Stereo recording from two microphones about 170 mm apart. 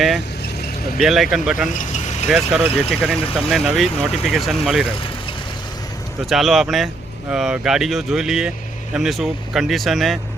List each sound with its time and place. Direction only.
0.9 s speech: centre (ahead or behind)
1.7 s speech: 45° left (ahead or behind)
2.2 s speech: 5° right (ahead or behind)
6.2 s speech: centre (ahead or behind)